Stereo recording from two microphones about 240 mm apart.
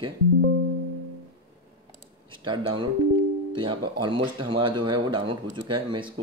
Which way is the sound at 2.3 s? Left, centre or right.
Centre.